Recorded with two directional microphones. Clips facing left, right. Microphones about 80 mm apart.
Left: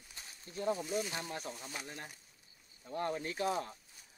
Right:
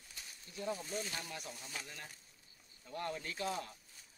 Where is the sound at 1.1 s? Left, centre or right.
Left.